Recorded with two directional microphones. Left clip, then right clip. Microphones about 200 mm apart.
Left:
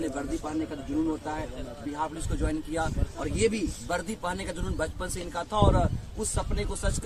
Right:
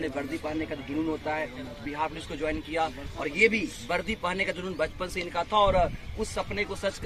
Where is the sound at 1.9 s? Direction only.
15° left (ahead or behind).